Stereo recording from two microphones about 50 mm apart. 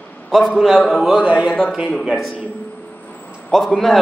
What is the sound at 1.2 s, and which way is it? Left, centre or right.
Speech, right.